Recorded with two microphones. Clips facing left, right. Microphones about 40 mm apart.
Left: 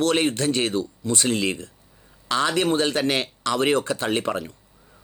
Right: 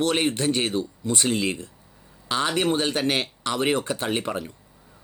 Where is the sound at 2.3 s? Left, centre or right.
Right.